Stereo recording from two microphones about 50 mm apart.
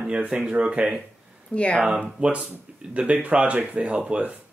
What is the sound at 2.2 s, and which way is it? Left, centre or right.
Speech, centre.